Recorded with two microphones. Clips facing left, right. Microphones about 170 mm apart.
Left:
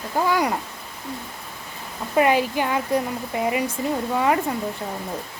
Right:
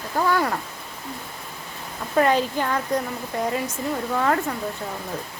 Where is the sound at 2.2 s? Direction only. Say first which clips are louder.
Left 1 dB; 10° left (ahead or behind).